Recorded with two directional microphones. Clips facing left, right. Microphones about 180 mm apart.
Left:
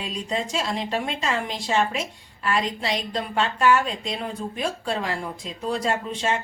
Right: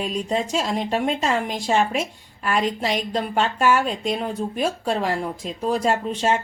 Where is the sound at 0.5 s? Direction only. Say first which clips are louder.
Right 3 dB; 45° right (ahead or behind).